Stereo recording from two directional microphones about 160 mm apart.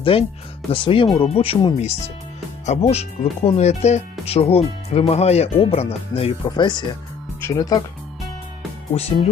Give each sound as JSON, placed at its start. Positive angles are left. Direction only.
{"t": 0.0, "sound": "speech", "side_deg": 35}
{"t": 8.9, "sound": "speech", "side_deg": 45}